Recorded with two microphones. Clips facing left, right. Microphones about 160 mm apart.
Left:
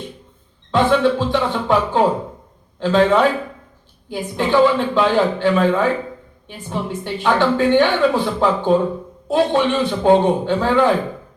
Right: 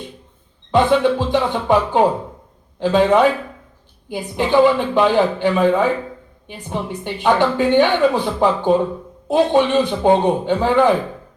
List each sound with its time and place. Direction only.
0.7 s a woman's voice: 15° right (ahead or behind)